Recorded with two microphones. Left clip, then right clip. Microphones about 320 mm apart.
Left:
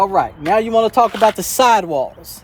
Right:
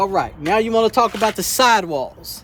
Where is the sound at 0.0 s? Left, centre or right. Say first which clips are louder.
Left 4 dB; centre.